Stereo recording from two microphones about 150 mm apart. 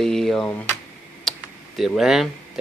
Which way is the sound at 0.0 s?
5° left (ahead or behind).